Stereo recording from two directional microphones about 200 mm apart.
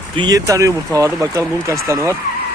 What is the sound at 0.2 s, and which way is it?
Speech, 20° right (ahead or behind).